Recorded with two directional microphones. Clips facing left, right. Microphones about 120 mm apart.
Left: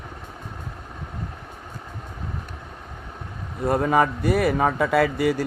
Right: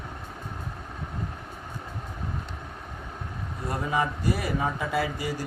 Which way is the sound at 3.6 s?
60° left (ahead or behind).